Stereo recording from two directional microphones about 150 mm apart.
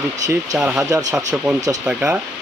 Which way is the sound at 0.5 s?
5° right (ahead or behind).